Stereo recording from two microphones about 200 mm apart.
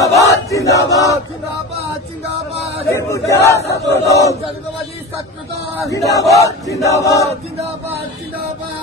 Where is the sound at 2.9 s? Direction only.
15° left (ahead or behind).